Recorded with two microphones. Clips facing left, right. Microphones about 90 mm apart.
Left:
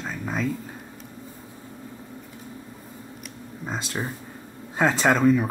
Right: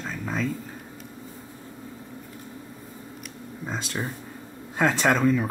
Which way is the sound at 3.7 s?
5° left (ahead or behind).